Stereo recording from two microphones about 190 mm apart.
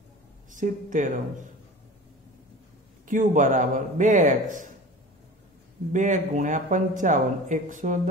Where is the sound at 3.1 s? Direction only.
45° right (ahead or behind).